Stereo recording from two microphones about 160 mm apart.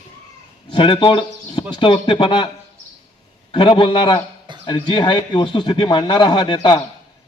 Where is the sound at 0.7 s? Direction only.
30° left (ahead or behind).